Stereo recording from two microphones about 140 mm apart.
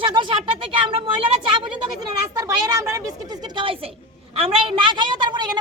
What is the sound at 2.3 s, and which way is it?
A woman's voice, 25° right (ahead or behind).